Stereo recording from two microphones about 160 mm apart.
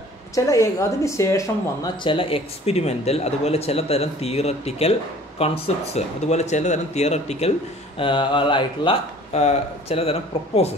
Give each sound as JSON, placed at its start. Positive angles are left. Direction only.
{"t": 0.3, "sound": "speech", "side_deg": 20}
{"t": 2.0, "sound": "speech", "side_deg": 35}
{"t": 8.0, "sound": "speech", "side_deg": 30}